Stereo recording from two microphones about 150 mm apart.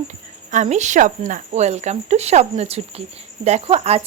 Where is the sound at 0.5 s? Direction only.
50° right (ahead or behind).